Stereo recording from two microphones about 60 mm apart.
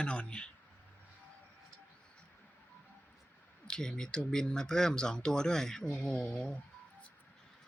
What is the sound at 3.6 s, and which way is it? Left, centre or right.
Speech, centre.